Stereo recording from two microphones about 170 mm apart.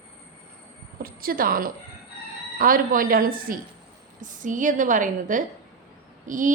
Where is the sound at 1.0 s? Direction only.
60° right (ahead or behind).